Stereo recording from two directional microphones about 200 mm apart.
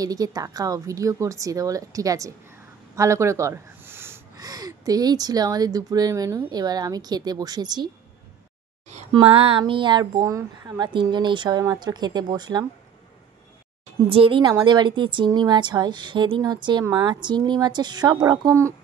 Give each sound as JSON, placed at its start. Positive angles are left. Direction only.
{"t": 0.0, "sound": "a woman's voice", "side_deg": -20}
{"t": 9.1, "sound": "speech", "side_deg": -30}
{"t": 14.0, "sound": "speech", "side_deg": -25}